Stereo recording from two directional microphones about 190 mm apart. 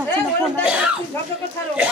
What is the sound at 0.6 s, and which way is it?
Speech, 5° right (ahead or behind).